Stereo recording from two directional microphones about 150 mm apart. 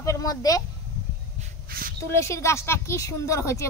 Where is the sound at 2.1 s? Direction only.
20° left (ahead or behind).